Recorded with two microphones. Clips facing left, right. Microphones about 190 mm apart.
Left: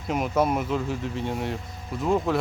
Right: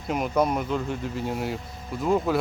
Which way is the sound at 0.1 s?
Centre (ahead or behind).